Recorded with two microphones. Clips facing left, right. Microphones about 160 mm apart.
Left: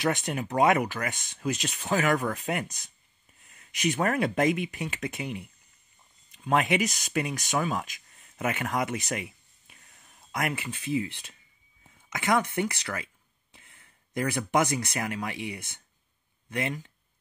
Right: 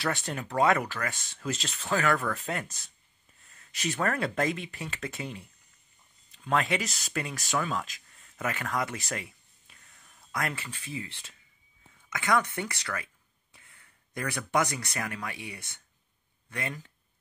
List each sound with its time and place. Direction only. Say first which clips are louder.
0.0 s speech: left 4 dB; 15° left (ahead or behind)